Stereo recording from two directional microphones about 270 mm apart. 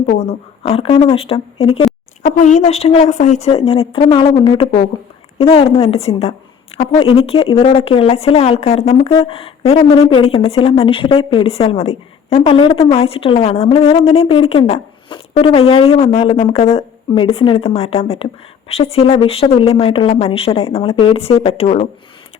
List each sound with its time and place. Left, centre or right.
0.0 s a woman's voice: left